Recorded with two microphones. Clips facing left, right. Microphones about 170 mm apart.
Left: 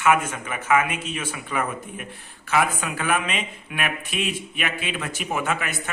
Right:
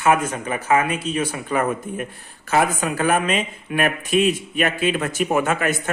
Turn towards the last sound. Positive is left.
turn(degrees=-45)  # may be behind; listen again after turning